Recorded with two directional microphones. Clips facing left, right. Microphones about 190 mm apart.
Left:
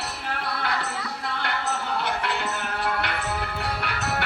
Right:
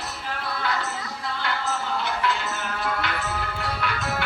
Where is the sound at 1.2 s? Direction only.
60° left (ahead or behind).